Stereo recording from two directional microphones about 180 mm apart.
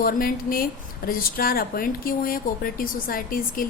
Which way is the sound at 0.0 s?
50° left (ahead or behind).